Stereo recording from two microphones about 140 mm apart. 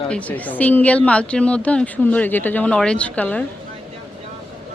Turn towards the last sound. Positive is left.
turn(degrees=10)  # may be behind; listen again after turning